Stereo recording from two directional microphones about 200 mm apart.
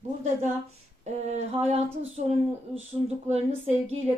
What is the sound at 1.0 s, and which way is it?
Speech, 35° right (ahead or behind).